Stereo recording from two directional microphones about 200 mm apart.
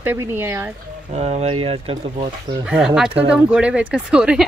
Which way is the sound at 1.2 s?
30° right (ahead or behind).